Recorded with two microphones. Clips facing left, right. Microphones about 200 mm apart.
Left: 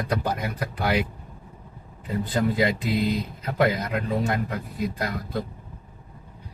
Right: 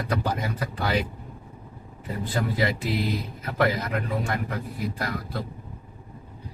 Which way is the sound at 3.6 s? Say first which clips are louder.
Left 1 dB; 20° left (ahead or behind).